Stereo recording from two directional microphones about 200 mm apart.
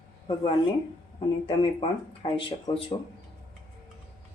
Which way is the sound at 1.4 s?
25° left (ahead or behind).